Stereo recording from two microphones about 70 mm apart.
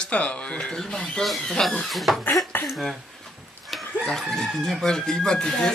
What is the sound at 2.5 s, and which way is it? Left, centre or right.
Throat clearing, left.